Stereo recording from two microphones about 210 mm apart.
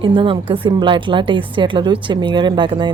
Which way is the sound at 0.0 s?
25° right (ahead or behind).